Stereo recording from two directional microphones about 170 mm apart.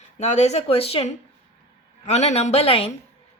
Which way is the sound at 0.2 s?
40° left (ahead or behind).